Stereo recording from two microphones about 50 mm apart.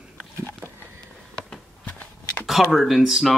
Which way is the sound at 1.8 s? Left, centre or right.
Left.